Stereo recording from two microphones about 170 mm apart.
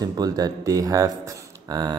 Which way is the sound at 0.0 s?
20° right (ahead or behind).